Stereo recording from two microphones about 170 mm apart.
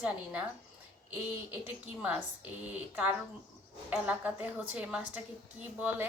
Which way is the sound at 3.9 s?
10° right (ahead or behind).